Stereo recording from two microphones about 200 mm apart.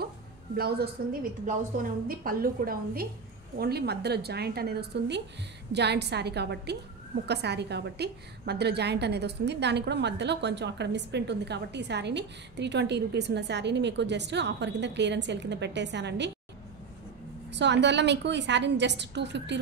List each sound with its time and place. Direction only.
0.6 s a woman's voice: 50° right (ahead or behind)
17.5 s a woman's voice: 60° right (ahead or behind)